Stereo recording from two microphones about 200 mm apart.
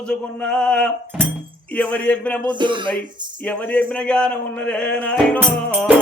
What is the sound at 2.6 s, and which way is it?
Speech, 25° right (ahead or behind).